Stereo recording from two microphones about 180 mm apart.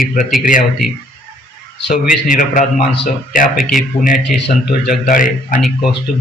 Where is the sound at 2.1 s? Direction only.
50° left (ahead or behind).